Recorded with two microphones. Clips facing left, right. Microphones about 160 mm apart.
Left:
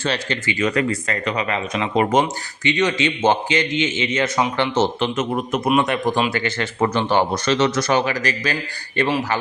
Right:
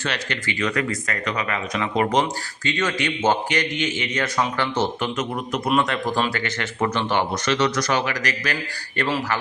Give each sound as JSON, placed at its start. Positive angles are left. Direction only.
{"t": 0.0, "sound": "speech", "side_deg": 30}
{"t": 6.3, "sound": "speech", "side_deg": 30}
{"t": 9.0, "sound": "speech", "side_deg": 15}